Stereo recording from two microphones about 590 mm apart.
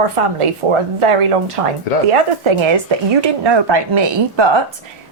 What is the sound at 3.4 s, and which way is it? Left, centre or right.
A woman's voice, right.